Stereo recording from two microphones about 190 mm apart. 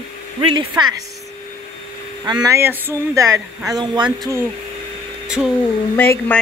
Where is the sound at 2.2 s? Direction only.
20° right (ahead or behind).